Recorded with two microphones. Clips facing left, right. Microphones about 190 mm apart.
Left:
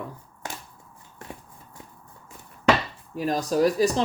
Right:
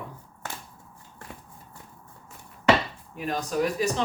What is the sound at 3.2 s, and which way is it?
Speech, 35° left (ahead or behind).